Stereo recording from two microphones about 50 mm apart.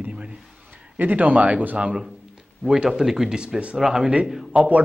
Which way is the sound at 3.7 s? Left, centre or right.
Centre.